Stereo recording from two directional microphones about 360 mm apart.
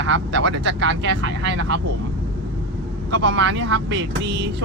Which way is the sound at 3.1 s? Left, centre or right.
Right.